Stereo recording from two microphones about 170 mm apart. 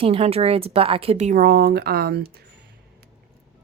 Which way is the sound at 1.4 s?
70° right (ahead or behind).